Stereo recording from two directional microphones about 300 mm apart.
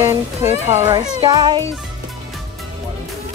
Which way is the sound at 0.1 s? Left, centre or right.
Centre.